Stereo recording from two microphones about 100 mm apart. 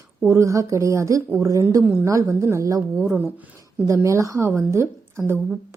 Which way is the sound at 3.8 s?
30° right (ahead or behind).